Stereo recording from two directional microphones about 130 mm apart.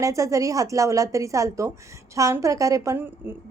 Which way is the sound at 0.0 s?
25° right (ahead or behind).